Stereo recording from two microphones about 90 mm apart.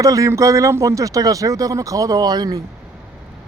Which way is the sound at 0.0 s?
35° right (ahead or behind).